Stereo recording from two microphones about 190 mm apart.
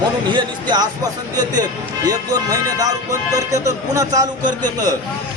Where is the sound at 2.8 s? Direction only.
15° right (ahead or behind).